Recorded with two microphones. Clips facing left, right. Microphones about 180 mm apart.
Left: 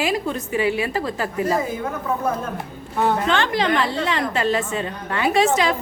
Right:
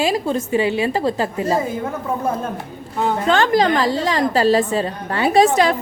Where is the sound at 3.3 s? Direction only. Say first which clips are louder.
Right 5 dB; 40° right (ahead or behind).